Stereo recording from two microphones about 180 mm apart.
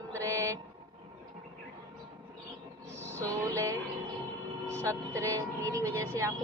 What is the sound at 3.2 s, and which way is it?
Music, 15° right (ahead or behind).